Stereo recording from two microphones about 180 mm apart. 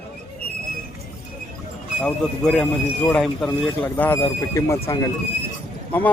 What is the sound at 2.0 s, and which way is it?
Speech, 5° left (ahead or behind).